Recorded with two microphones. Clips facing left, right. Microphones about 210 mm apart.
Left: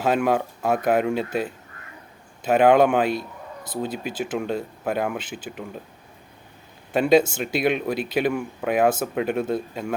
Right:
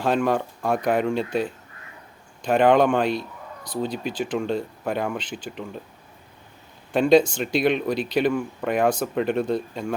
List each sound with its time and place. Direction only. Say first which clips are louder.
0.0 s speech: left 1 dB; 5° left (ahead or behind)
6.9 s speech: right 1 dB; 5° left (ahead or behind)